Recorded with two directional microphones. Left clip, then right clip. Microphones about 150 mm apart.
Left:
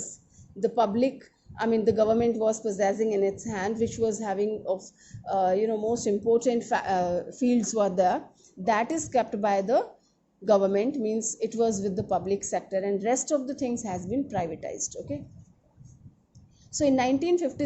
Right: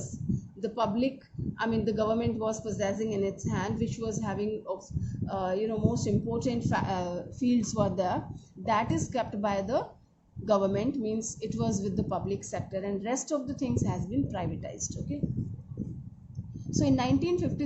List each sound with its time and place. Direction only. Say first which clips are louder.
0.6 s a woman's voice: left 6 dB; 45° left (ahead or behind)
16.7 s a woman's voice: left 4 dB; 40° left (ahead or behind)